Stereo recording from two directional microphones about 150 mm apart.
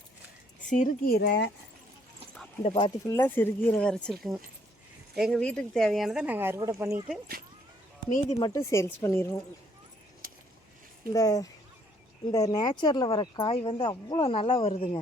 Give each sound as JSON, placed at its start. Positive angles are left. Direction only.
{"t": 0.7, "sound": "speech", "side_deg": 55}
{"t": 1.0, "sound": "speech", "side_deg": 90}
{"t": 2.6, "sound": "speech", "side_deg": 35}
{"t": 3.1, "sound": "speech", "side_deg": 15}
{"t": 8.3, "sound": "speech", "side_deg": 25}
{"t": 10.2, "sound": "a sound", "side_deg": -75}
{"t": 11.1, "sound": "speech", "side_deg": 25}